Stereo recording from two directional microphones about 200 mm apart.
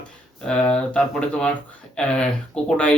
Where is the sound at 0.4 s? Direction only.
5° left (ahead or behind).